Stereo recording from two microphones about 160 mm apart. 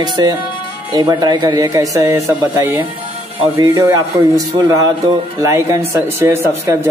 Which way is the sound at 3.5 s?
25° right (ahead or behind).